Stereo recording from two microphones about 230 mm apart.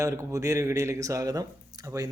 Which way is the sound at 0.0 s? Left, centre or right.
Centre.